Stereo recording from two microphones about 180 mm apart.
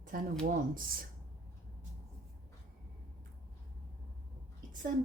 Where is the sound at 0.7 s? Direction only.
50° right (ahead or behind).